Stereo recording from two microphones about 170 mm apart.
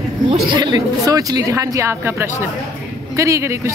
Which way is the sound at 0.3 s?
25° right (ahead or behind).